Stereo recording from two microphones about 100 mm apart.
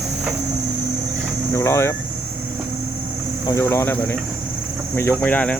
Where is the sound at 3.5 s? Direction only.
25° left (ahead or behind).